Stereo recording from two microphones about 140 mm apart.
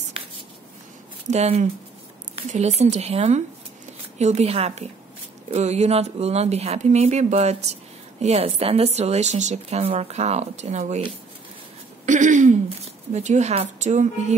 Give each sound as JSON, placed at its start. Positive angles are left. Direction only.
{"t": 1.3, "sound": "speech", "side_deg": -50}
{"t": 12.1, "sound": "a sound", "side_deg": -65}
{"t": 12.6, "sound": "a woman's voice", "side_deg": -55}